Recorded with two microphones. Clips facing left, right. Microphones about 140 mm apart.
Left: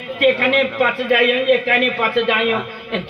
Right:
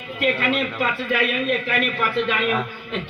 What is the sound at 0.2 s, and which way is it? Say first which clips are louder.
Speech: left 7 dB; 60° left (ahead or behind).